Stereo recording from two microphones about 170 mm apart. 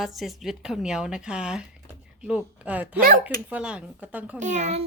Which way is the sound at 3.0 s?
55° right (ahead or behind).